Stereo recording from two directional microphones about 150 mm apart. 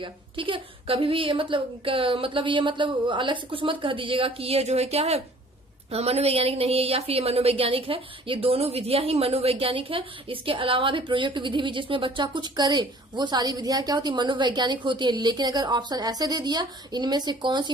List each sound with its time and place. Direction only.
0.0 s a woman's voice: 35° right (ahead or behind)